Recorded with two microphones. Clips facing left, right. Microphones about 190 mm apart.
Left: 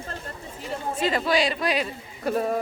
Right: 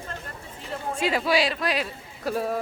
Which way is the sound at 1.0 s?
10° right (ahead or behind).